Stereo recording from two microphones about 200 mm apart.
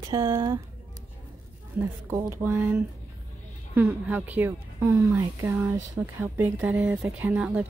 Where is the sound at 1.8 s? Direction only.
10° right (ahead or behind).